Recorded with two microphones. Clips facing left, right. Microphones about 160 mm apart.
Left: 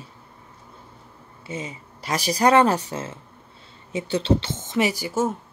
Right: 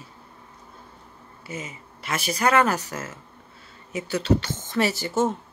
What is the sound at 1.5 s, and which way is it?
Speech, 30° left (ahead or behind).